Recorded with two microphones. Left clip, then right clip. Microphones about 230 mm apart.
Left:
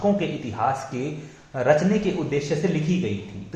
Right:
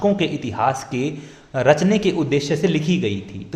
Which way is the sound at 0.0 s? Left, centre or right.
Right.